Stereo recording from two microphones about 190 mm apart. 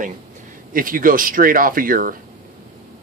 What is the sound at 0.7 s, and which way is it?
Speech, 45° right (ahead or behind).